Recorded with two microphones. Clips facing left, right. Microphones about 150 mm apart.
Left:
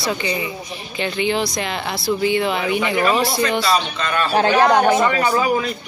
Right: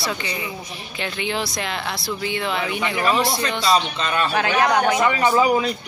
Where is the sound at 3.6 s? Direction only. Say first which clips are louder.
Even; 15° right (ahead or behind).